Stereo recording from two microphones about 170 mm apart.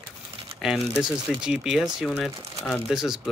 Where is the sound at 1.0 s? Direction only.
5° right (ahead or behind).